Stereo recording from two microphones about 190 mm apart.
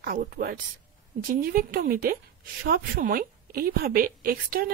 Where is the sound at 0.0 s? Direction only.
50° right (ahead or behind).